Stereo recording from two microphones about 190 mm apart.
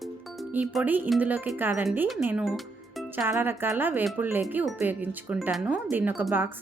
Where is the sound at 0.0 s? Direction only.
Centre (ahead or behind).